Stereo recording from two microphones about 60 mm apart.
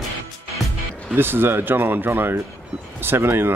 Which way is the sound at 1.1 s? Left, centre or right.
Right.